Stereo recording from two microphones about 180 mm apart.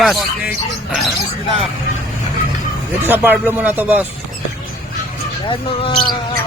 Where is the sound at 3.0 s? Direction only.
10° right (ahead or behind).